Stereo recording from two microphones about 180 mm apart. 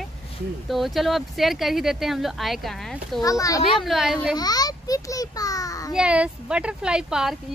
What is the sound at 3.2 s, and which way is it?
Speech, 20° left (ahead or behind).